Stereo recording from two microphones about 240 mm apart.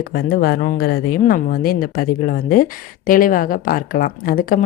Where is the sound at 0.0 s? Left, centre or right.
Left.